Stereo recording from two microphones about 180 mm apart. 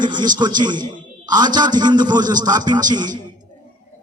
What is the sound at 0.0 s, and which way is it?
A man's voice, 25° right (ahead or behind).